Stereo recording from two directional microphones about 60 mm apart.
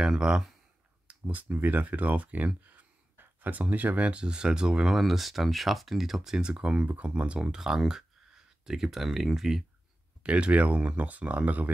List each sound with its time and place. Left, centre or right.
0.0 s speech: centre
1.2 s speech: right
7.3 s speech: centre
10.2 s speech: centre